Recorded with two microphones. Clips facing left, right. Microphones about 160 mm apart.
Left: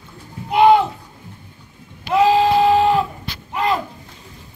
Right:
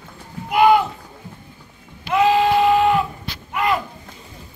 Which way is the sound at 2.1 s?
30° left (ahead or behind).